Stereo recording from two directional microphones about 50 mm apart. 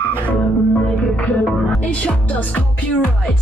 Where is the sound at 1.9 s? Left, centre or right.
Left.